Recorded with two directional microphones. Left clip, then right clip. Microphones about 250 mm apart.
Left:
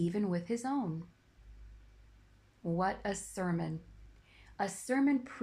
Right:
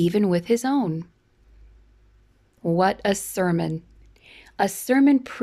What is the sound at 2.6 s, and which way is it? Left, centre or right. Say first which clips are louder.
Speech: right 13 dB; right.